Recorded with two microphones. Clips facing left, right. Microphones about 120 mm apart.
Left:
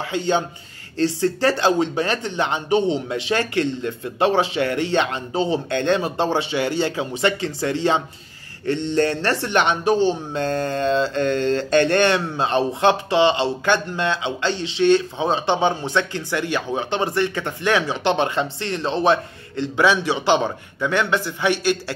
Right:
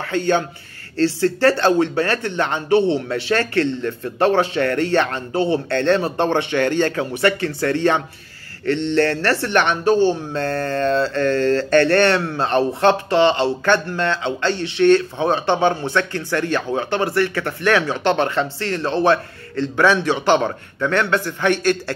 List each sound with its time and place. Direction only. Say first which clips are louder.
0.0 s speech: right 2 dB; 15° left (ahead or behind)